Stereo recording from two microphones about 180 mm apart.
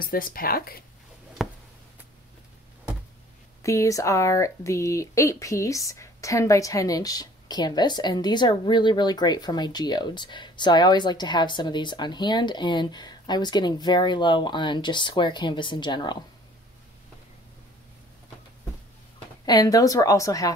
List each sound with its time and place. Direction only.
0.0 s speech: 55° left (ahead or behind)
1.4 s a sound: centre (ahead or behind)
3.6 s speech: 15° left (ahead or behind)
19.4 s speech: 20° left (ahead or behind)